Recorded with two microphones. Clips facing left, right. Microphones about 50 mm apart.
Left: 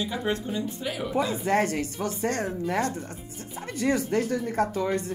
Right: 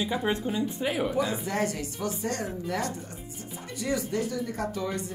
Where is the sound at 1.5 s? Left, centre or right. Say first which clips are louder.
Left 5 dB; left.